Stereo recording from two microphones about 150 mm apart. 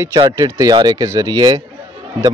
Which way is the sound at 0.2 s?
25° right (ahead or behind).